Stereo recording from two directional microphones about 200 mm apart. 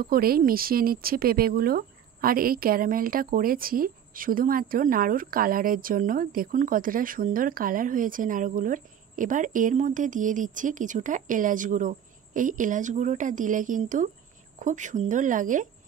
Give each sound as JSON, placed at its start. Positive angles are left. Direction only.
{"t": 0.0, "sound": "speech", "side_deg": -50}